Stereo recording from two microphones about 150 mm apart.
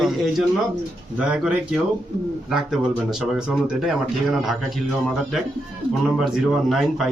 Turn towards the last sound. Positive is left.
turn(degrees=0)  # may be behind; listen again after turning